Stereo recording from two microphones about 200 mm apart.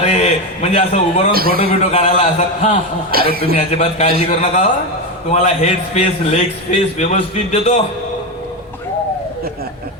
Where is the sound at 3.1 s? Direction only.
50° right (ahead or behind).